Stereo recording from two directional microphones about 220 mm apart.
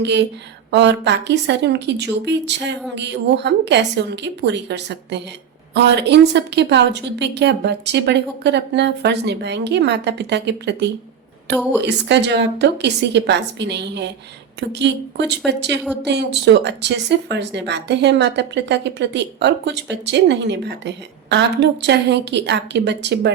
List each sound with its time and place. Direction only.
0.0 s speech: 50° right (ahead or behind)